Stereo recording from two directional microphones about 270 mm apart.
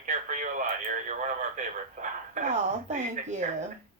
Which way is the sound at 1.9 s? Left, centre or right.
Right.